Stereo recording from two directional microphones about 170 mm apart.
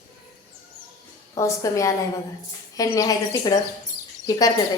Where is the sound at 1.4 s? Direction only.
20° left (ahead or behind).